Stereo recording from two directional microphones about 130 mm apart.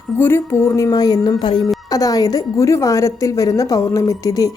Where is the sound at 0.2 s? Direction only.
20° left (ahead or behind).